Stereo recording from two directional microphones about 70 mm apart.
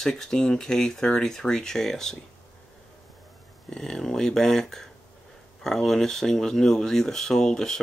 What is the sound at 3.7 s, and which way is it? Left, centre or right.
Speech, centre.